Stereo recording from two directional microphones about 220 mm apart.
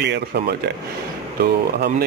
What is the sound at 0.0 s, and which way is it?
Speech, 50° right (ahead or behind).